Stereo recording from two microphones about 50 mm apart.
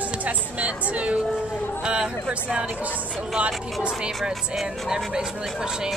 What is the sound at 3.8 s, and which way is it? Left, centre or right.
Speech, centre.